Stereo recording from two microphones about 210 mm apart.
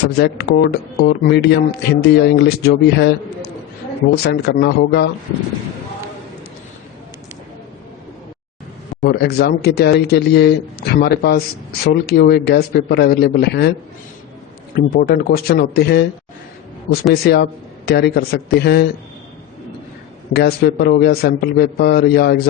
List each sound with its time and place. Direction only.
0.2 s speech: 55° left (ahead or behind)
9.0 s speech: 50° left (ahead or behind)
14.9 s speech: 45° left (ahead or behind)
20.3 s speech: 50° left (ahead or behind)